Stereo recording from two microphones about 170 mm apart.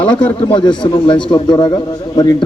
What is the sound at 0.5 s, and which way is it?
Speech, 30° left (ahead or behind).